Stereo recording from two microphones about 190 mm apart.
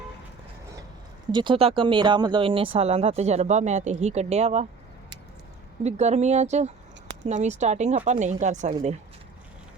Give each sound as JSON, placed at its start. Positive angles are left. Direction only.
{"t": 1.3, "sound": "speech", "side_deg": -25}
{"t": 5.8, "sound": "speech", "side_deg": -35}